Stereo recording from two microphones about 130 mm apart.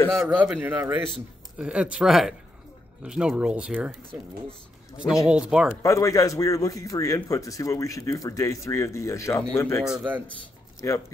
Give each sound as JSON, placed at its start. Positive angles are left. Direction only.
{"t": 0.2, "sound": "speech", "side_deg": -5}
{"t": 5.2, "sound": "speech", "side_deg": -5}
{"t": 5.8, "sound": "speech", "side_deg": 25}
{"t": 9.8, "sound": "speech", "side_deg": -10}
{"t": 10.8, "sound": "speech", "side_deg": 20}